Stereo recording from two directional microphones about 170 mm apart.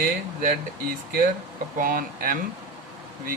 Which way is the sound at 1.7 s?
55° right (ahead or behind).